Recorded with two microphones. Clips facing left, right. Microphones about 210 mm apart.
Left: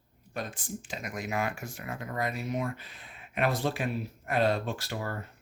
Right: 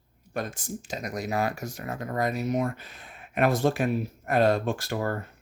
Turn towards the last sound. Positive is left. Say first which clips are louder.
# right 6 dB
turn(degrees=-50)  # may be behind; listen again after turning